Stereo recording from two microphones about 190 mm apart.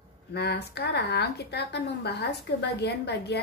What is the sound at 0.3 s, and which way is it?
A woman's voice, 60° left (ahead or behind).